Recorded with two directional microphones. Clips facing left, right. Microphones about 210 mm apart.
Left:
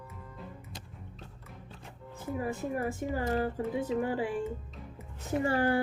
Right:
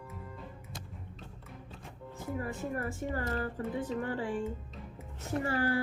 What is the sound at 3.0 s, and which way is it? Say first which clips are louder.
Speech: left 4 dB; 15° left (ahead or behind).